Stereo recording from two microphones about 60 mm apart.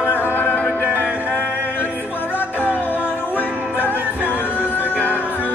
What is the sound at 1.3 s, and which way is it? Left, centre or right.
Music, left.